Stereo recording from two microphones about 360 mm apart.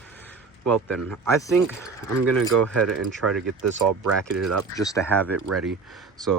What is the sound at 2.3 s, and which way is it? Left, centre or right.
Speech, right.